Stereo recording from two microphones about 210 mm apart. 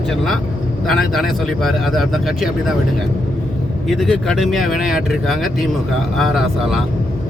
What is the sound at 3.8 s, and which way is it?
Speech, centre (ahead or behind).